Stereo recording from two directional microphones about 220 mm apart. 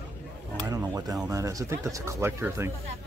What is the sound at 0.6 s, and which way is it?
Speech, 15° right (ahead or behind).